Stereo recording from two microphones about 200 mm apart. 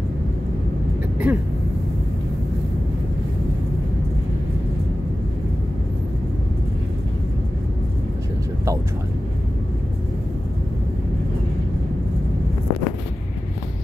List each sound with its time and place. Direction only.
1.3 s speech: 5° right (ahead or behind)